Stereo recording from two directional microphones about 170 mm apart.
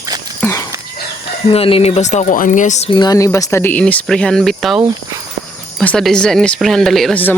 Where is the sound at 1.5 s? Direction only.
35° left (ahead or behind).